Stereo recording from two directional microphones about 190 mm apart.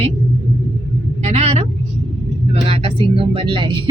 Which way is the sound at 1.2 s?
35° right (ahead or behind).